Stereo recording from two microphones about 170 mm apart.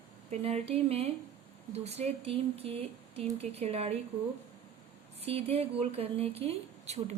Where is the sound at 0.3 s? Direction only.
35° right (ahead or behind).